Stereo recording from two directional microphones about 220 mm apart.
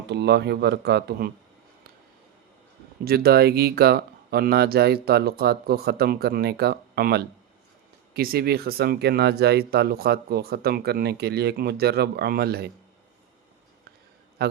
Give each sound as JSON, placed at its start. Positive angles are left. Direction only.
{"t": 0.1, "sound": "speech", "side_deg": -50}
{"t": 3.0, "sound": "speech", "side_deg": -45}